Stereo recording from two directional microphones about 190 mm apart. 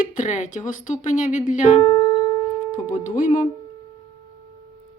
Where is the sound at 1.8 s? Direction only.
15° left (ahead or behind).